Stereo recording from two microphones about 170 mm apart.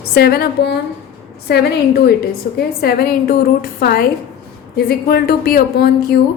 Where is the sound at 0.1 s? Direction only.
65° left (ahead or behind).